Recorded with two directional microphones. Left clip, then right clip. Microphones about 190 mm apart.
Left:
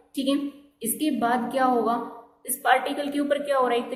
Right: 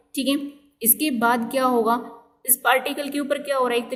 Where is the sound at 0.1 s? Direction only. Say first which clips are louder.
Right 2 dB; 35° right (ahead or behind).